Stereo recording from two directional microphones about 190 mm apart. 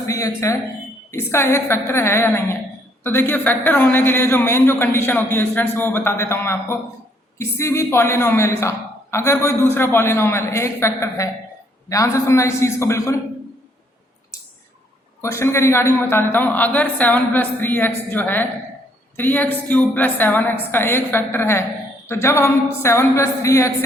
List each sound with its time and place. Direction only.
0.1 s a woman's voice: 15° left (ahead or behind)
15.2 s a woman's voice: 15° left (ahead or behind)